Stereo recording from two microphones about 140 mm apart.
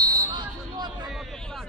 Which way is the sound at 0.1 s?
30° right (ahead or behind).